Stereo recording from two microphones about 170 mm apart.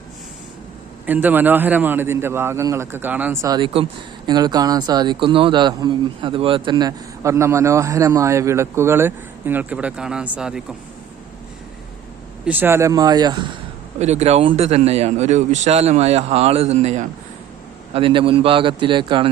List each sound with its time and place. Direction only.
1.0 s speech: 10° right (ahead or behind)
3.4 s speech: 25° right (ahead or behind); by 10.8 s 5° right (ahead or behind)
12.5 s speech: 10° right (ahead or behind)
14.0 s speech: 40° right (ahead or behind)
17.9 s speech: 30° right (ahead or behind)